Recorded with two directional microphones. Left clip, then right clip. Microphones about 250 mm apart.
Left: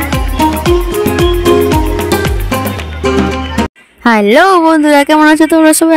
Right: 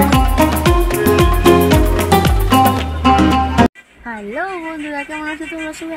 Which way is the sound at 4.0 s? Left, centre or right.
Left.